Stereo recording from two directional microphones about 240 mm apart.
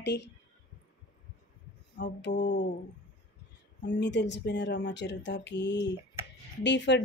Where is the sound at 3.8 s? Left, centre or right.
Left.